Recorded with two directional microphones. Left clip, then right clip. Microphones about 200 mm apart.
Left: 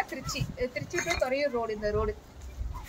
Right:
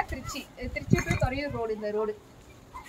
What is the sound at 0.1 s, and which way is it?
Speech, 20° left (ahead or behind).